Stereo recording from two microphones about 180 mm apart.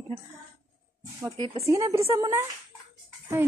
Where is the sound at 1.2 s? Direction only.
15° right (ahead or behind).